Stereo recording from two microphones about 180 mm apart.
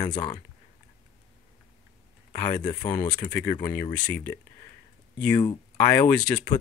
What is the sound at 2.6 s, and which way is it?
Speech, 25° left (ahead or behind).